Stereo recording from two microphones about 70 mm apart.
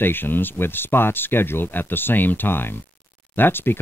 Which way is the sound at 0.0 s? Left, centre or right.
Left.